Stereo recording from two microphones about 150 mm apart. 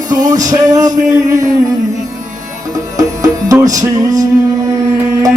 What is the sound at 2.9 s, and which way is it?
Music, 25° right (ahead or behind).